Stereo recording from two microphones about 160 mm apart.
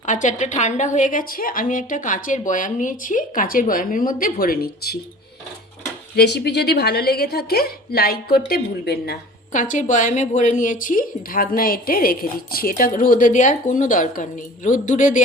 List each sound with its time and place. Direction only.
0.0 s a woman's voice: 50° left (ahead or behind); by 4.9 s 70° left (ahead or behind)
6.1 s a woman's voice: 90° left
9.5 s a woman's voice: 50° left (ahead or behind)